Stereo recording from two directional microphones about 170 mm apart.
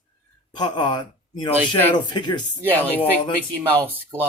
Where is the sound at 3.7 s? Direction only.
15° right (ahead or behind).